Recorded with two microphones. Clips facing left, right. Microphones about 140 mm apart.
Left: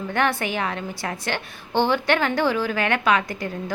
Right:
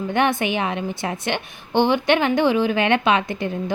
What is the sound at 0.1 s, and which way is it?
A woman's voice, 20° right (ahead or behind).